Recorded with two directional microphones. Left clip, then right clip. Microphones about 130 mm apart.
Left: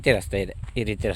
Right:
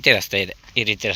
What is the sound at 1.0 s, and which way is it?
Speech, 55° left (ahead or behind).